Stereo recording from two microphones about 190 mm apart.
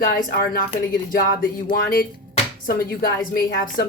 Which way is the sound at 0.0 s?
50° left (ahead or behind).